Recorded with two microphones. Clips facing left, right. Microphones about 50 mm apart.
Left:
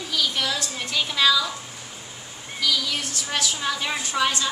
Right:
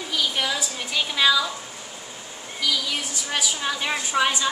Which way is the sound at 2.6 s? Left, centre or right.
Centre.